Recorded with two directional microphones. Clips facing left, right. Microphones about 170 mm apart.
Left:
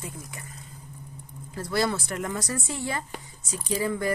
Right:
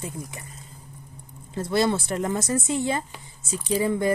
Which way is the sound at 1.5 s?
25° right (ahead or behind).